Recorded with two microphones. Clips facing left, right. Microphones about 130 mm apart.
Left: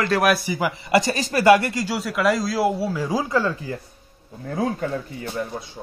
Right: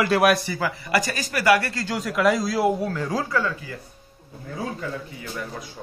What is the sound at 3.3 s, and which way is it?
Speech, 30° left (ahead or behind).